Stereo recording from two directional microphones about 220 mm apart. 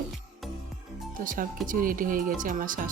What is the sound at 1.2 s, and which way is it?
Speech, 40° right (ahead or behind).